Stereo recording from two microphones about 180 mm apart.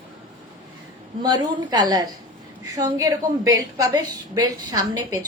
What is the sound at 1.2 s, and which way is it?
A woman's voice, 20° right (ahead or behind).